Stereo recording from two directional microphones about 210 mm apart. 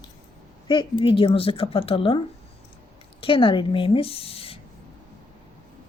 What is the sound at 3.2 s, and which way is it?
A woman's voice, 25° left (ahead or behind).